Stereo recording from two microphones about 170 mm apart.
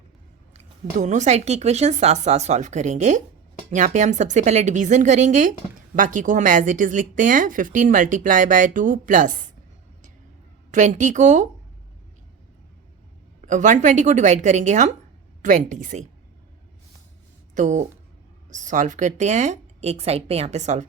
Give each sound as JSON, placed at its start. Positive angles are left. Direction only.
{"t": 0.5, "sound": "speech", "side_deg": -45}
{"t": 10.7, "sound": "speech", "side_deg": -45}
{"t": 13.4, "sound": "speech", "side_deg": -45}
{"t": 17.5, "sound": "speech", "side_deg": -45}